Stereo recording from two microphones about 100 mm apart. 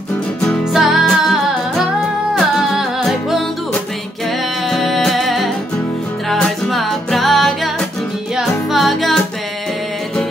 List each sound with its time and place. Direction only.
0.7 s music: centre (ahead or behind)
4.6 s music: centre (ahead or behind)